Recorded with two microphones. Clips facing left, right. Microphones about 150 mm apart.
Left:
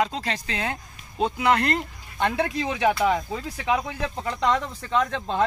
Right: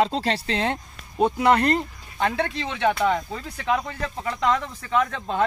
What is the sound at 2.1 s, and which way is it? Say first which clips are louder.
Speech: even; centre (ahead or behind).